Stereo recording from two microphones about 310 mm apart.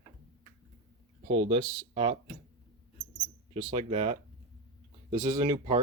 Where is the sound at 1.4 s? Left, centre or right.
Centre.